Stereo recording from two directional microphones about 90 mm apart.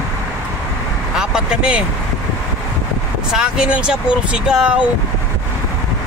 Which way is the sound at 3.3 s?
10° right (ahead or behind).